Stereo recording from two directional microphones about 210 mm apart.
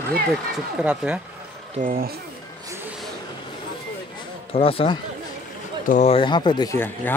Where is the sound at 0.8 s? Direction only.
5° right (ahead or behind).